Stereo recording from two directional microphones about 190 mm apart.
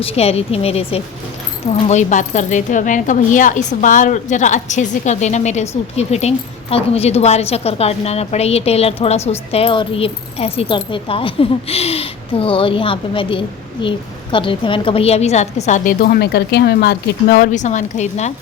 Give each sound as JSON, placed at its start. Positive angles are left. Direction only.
{"t": 0.0, "sound": "speech", "side_deg": 30}